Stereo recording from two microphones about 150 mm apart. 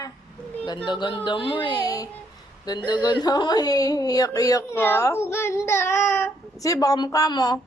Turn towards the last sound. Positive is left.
turn(degrees=25)  # may be behind; listen again after turning